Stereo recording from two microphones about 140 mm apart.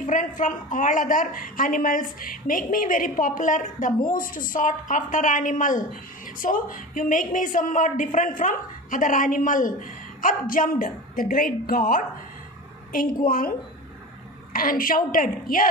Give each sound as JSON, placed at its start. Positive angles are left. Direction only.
{"t": 0.0, "sound": "a man's voice", "side_deg": 65}